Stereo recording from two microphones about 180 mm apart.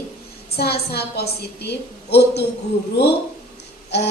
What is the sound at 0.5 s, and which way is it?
A woman's voice, 60° left (ahead or behind).